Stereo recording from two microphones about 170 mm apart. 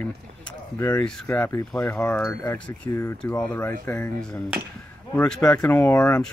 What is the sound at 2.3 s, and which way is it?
Speech, 20° left (ahead or behind).